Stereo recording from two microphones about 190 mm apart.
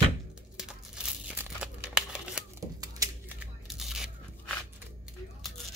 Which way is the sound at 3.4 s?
Centre (ahead or behind).